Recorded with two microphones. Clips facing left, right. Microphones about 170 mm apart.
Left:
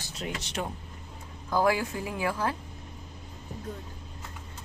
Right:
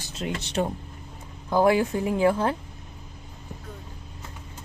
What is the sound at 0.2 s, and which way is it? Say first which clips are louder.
Speech: right 7 dB; 30° right (ahead or behind).